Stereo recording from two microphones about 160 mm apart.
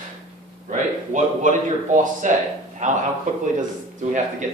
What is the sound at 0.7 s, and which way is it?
A man's voice, 50° right (ahead or behind).